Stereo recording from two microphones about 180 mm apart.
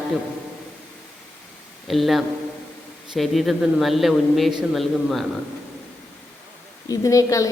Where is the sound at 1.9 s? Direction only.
Centre (ahead or behind).